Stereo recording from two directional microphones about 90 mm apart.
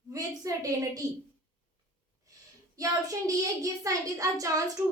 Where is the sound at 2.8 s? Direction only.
40° right (ahead or behind).